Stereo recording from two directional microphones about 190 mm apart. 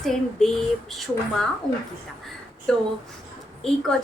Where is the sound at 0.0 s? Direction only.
Centre (ahead or behind).